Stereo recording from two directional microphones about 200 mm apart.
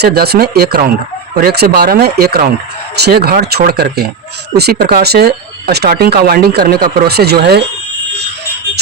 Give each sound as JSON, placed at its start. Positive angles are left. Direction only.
{"t": 0.0, "sound": "speech", "side_deg": -50}